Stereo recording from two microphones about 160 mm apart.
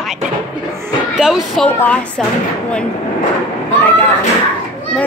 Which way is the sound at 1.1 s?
Centre (ahead or behind).